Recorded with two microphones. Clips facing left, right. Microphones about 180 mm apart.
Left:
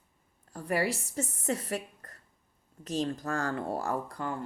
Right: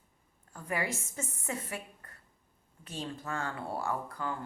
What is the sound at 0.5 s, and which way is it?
A woman's voice, 35° left (ahead or behind).